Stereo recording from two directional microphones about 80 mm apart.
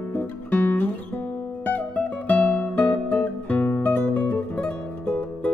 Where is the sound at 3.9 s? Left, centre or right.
Centre.